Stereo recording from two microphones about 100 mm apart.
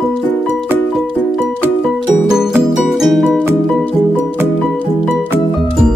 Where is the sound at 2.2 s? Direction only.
5° right (ahead or behind).